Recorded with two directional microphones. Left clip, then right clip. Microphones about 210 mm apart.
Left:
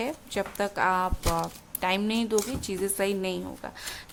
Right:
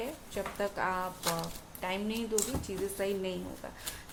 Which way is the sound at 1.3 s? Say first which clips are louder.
Left 8 dB; 45° left (ahead or behind).